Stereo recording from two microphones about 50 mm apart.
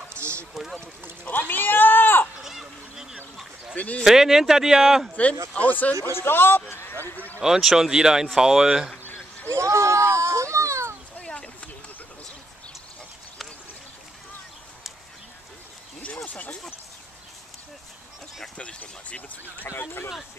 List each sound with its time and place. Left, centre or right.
0.6 s speech: centre
1.2 s a sound: left
2.4 s a sound: centre
3.7 s speech: left
4.0 s speech: centre
5.5 s speech: left
6.1 s a man's voice: left
7.4 s speech: centre
9.5 s children playing: right
11.1 s a sound: left
18.6 s a sound: left
19.8 s speech: left